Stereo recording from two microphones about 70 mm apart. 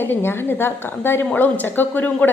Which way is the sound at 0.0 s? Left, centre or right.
Left.